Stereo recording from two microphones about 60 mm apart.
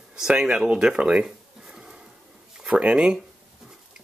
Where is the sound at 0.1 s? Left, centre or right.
Centre.